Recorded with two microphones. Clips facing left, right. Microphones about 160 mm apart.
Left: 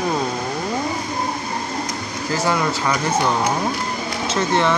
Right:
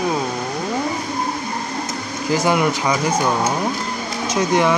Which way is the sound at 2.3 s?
15° right (ahead or behind).